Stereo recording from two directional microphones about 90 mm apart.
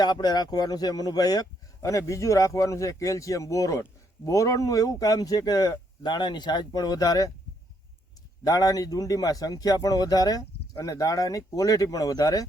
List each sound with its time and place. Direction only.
0.0 s speech: 50° left (ahead or behind)
8.4 s speech: 45° left (ahead or behind)